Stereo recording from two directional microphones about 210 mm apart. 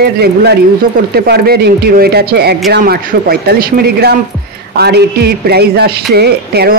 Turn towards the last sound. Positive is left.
turn(degrees=-50)  # may be behind; listen again after turning